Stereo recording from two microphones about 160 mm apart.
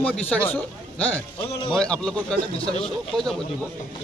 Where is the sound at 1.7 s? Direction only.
5° left (ahead or behind).